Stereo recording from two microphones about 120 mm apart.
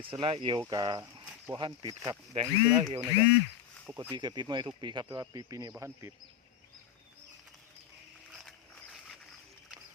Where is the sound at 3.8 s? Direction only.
15° right (ahead or behind).